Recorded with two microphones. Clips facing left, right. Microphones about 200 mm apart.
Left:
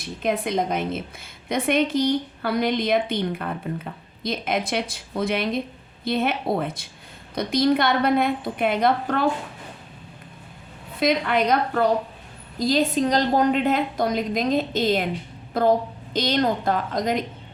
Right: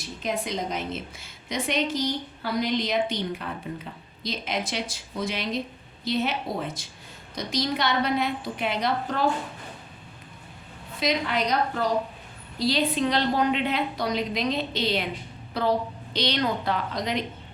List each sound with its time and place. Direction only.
0.2 s a woman's voice: 55° left (ahead or behind)
11.0 s a woman's voice: 55° left (ahead or behind)